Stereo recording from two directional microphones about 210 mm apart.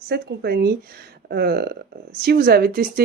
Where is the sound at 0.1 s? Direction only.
50° right (ahead or behind).